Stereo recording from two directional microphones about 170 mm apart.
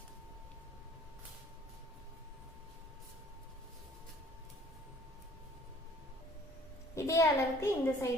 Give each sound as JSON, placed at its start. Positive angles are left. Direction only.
{"t": 6.9, "sound": "a woman's voice", "side_deg": 15}